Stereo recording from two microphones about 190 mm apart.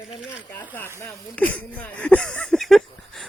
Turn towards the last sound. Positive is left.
turn(degrees=0)  # may be behind; listen again after turning